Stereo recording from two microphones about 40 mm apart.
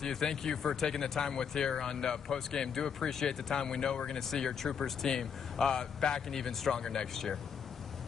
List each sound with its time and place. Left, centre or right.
0.0 s speech: centre